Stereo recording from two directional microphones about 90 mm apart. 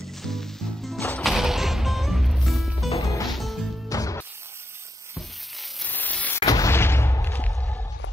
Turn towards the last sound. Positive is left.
turn(degrees=20)  # may be behind; listen again after turning